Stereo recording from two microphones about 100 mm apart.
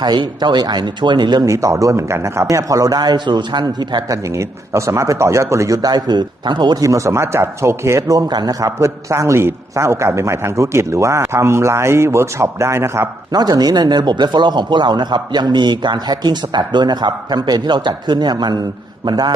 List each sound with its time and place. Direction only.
0.0 s speech: 45° right (ahead or behind)
1.5 s a man's voice: 30° right (ahead or behind)
4.3 s a man's voice: 30° right (ahead or behind); by 6.8 s 50° right (ahead or behind)
6.8 s a man's voice: 30° right (ahead or behind)
13.3 s speech: 40° right (ahead or behind)